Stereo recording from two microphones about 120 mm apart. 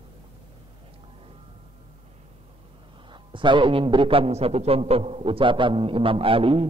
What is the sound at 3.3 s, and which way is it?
A man's voice, 45° right (ahead or behind).